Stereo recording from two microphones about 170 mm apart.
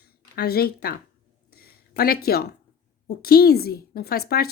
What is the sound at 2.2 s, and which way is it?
Speech, 65° left (ahead or behind).